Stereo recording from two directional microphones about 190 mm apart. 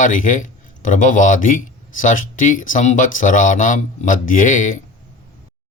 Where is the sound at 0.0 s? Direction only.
45° left (ahead or behind).